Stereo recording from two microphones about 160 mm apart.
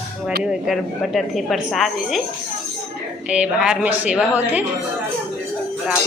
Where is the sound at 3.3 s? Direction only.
5° right (ahead or behind).